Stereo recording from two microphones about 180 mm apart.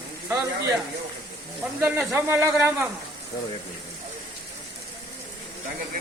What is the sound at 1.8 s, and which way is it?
Speech, 10° right (ahead or behind).